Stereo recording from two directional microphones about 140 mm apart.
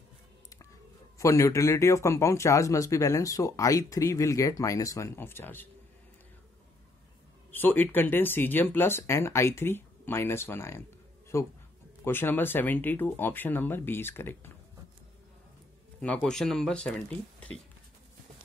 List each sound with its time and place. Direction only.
1.1 s speech: 20° left (ahead or behind)
7.5 s speech: 15° left (ahead or behind)
16.0 s speech: 5° left (ahead or behind)